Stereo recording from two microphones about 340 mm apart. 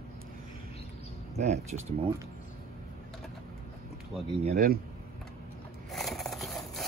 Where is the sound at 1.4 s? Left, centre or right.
Centre.